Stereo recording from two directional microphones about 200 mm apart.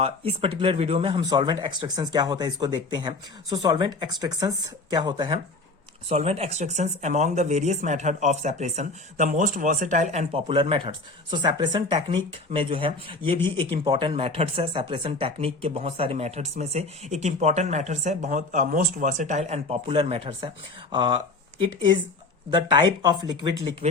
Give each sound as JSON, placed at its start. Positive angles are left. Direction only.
{"t": 0.0, "sound": "speech", "side_deg": -25}
{"t": 22.4, "sound": "speech", "side_deg": -20}